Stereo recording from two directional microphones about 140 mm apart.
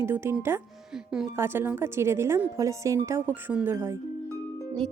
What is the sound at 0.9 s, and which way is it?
Speech, 5° right (ahead or behind).